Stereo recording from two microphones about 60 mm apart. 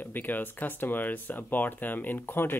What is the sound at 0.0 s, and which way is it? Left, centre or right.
Speech, left.